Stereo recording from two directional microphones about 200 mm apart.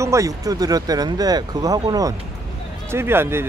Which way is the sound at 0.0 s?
15° right (ahead or behind).